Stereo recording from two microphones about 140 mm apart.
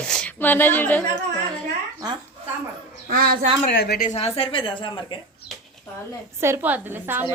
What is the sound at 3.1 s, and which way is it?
Speech, 90° right.